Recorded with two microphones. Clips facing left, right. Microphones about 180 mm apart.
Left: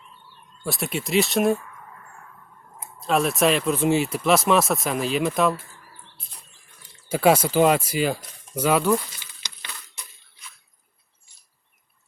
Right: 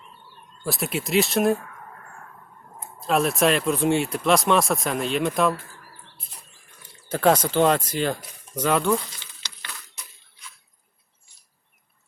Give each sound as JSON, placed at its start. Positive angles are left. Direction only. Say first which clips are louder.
{"t": 0.6, "sound": "speech", "louder": "right 1 dB", "side_deg": 0}
{"t": 3.0, "sound": "speech", "louder": "even", "side_deg": 0}
{"t": 7.1, "sound": "speech", "louder": "left 1 dB", "side_deg": 10}
{"t": 9.4, "sound": "a sound", "louder": "even", "side_deg": 20}